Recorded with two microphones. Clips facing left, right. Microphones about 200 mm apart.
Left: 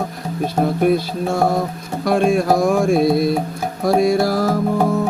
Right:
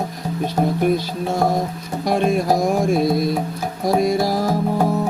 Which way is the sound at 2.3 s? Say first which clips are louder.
Left 2 dB; 50° left (ahead or behind).